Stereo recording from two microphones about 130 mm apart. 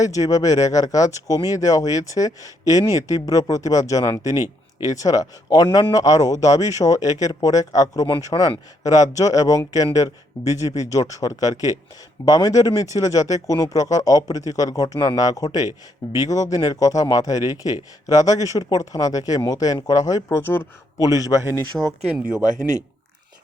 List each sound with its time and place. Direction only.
0.0 s speech: 25° left (ahead or behind)
20.3 s speech: 15° left (ahead or behind)
21.0 s speech: 25° left (ahead or behind)
21.8 s speech: centre (ahead or behind)